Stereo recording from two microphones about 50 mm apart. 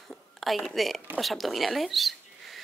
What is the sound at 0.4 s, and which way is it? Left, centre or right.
Speech, centre.